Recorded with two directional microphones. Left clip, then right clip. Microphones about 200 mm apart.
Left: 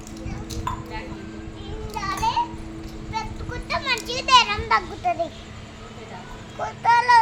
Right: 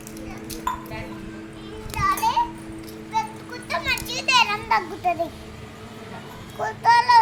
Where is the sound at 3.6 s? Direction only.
10° left (ahead or behind).